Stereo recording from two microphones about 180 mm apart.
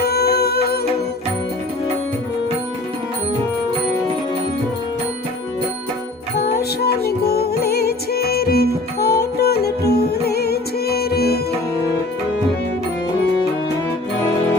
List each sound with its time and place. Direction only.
0.0 s music: 60° left (ahead or behind)
6.3 s music: 65° left (ahead or behind)